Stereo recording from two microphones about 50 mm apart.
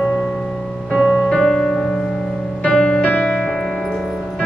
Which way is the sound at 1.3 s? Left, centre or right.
Centre.